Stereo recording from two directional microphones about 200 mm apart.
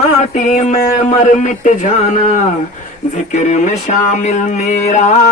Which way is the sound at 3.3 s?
35° left (ahead or behind).